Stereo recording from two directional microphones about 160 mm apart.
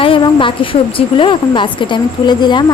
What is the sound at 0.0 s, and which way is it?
A woman's voice, 30° left (ahead or behind).